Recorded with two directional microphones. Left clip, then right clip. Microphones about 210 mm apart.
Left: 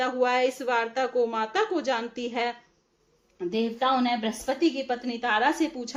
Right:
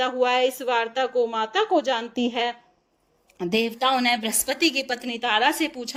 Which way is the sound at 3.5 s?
50° right (ahead or behind).